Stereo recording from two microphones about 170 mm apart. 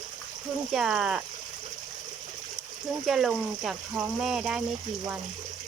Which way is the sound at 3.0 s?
5° right (ahead or behind).